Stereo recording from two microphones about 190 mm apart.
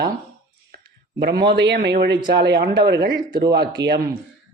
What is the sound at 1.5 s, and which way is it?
Speech, 65° right (ahead or behind).